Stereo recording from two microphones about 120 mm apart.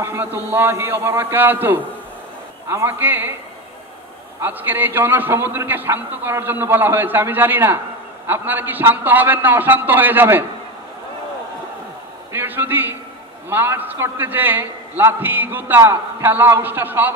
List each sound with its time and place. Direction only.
0.0 s a man's voice: 20° right (ahead or behind)
4.4 s a man's voice: 15° right (ahead or behind)
12.3 s a man's voice: 15° right (ahead or behind)